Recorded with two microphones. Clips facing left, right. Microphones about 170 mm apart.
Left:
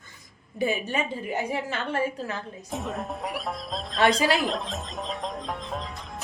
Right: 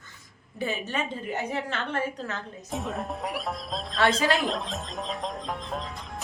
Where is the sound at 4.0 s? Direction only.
15° left (ahead or behind).